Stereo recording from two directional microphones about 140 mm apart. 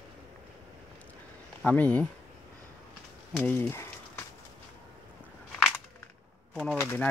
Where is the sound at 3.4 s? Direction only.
15° left (ahead or behind).